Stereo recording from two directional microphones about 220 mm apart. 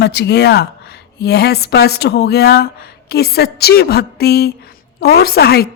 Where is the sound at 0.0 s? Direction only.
50° left (ahead or behind).